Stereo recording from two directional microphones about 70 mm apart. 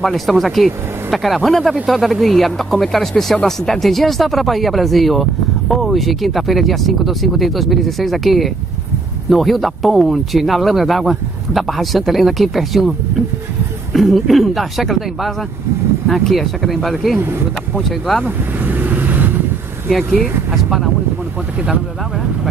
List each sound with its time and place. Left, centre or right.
0.0 s speech: centre
13.9 s speech: centre
18.2 s vehicle: right
19.9 s speech: centre